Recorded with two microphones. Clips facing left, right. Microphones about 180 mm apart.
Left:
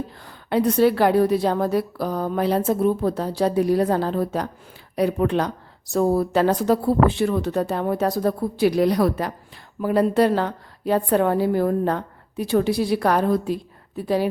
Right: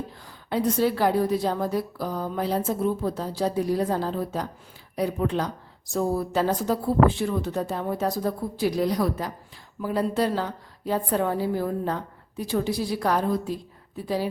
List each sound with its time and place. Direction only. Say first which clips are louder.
0.3 s a woman's voice: left 4 dB; 65° left (ahead or behind)